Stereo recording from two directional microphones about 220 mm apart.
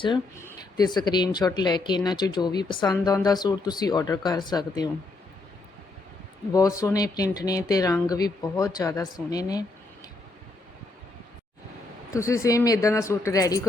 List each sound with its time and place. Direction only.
0.0 s speech: 15° left (ahead or behind)
6.5 s speech: 15° left (ahead or behind)
12.1 s speech: 15° left (ahead or behind)